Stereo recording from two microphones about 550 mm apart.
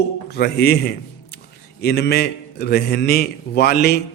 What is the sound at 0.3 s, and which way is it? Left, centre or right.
A man's voice, centre.